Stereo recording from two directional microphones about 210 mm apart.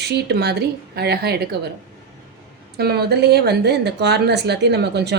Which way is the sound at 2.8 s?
50° right (ahead or behind).